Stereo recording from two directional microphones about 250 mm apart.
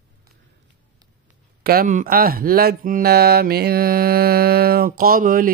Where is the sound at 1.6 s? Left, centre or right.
Right.